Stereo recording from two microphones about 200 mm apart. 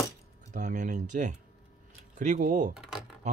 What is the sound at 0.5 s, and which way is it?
Speech, 40° right (ahead or behind).